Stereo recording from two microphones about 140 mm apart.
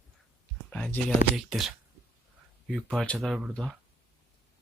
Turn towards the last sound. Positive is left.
turn(degrees=0)  # may be behind; listen again after turning